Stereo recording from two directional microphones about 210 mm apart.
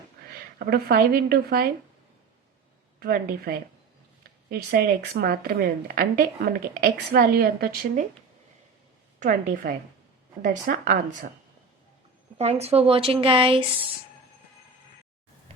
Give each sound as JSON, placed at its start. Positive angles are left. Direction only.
{"t": 0.6, "sound": "a woman's voice", "side_deg": -45}
{"t": 3.0, "sound": "a woman's voice", "side_deg": -45}
{"t": 9.2, "sound": "a woman's voice", "side_deg": -40}
{"t": 12.4, "sound": "speech", "side_deg": -30}